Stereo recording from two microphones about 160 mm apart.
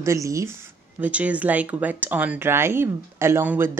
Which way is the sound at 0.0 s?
20° right (ahead or behind).